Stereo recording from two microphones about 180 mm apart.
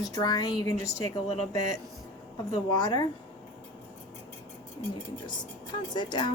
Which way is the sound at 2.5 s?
20° left (ahead or behind).